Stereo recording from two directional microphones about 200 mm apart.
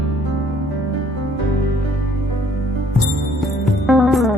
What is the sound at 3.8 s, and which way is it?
Music, centre (ahead or behind).